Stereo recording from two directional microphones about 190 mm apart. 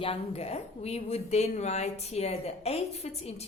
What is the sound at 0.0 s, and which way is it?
A woman's voice, 30° left (ahead or behind).